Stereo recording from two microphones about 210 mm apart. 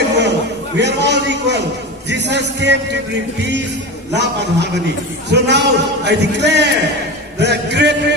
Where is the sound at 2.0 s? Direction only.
55° right (ahead or behind).